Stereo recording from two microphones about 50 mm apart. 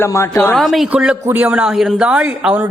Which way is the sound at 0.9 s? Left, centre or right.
Centre.